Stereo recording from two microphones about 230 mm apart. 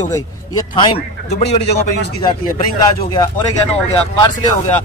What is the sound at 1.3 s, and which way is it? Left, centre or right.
Speech, left.